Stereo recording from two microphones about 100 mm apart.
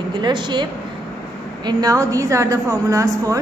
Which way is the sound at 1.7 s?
40° right (ahead or behind).